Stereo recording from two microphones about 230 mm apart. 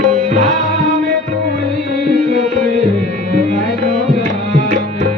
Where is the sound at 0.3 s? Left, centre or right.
Right.